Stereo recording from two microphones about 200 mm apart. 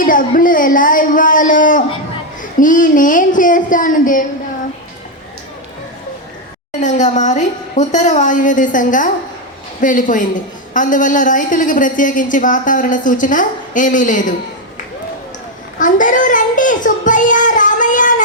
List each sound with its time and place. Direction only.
0.0 s a woman's voice: 40° left (ahead or behind)
6.7 s a woman's voice: 35° left (ahead or behind)
15.8 s child singing: 40° left (ahead or behind)